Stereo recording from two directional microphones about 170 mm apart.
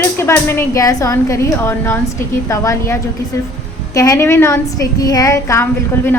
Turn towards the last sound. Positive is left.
turn(degrees=15)  # may be behind; listen again after turning